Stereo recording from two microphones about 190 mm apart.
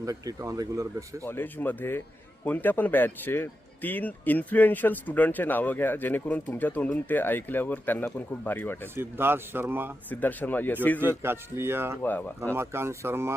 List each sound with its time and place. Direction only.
0.0 s speech: 20° right (ahead or behind)
1.2 s speech: 10° left (ahead or behind)
9.0 s speech: 10° right (ahead or behind)
10.1 s speech: 10° left (ahead or behind)
11.0 s speech: 10° right (ahead or behind)
12.0 s speech: 10° left (ahead or behind)
12.5 s speech: 15° right (ahead or behind)